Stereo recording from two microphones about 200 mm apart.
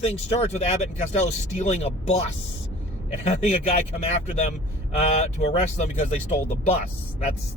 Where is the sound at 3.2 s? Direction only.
35° left (ahead or behind).